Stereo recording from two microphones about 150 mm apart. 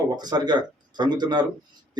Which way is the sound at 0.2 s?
30° right (ahead or behind).